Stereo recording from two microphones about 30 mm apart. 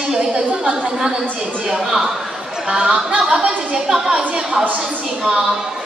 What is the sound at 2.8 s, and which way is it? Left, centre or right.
Speech, right.